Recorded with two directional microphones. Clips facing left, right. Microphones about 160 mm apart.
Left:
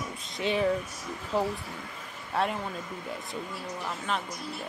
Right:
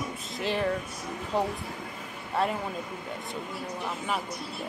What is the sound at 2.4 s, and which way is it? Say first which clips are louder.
Speech: right 1 dB; centre (ahead or behind).